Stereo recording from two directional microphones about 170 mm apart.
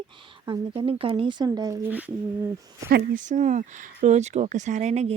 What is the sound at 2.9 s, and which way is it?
Speech, 50° right (ahead or behind).